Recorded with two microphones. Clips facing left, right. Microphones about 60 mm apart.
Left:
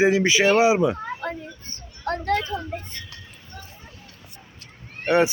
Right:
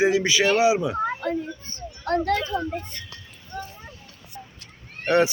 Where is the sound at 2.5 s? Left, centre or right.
Centre.